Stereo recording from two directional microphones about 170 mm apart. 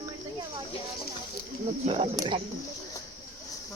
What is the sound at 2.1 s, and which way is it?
Speech, 20° right (ahead or behind).